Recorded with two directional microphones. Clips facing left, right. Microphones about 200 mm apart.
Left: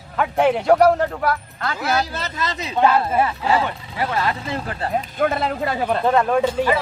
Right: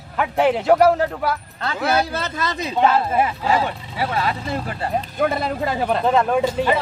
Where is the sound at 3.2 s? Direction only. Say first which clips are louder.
Even; 15° right (ahead or behind).